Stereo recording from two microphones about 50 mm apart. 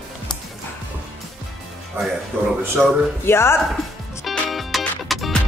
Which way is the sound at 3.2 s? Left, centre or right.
Left.